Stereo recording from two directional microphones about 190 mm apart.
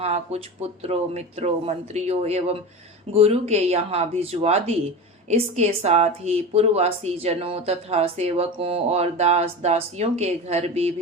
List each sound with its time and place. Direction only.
0.0 s speech: 35° right (ahead or behind)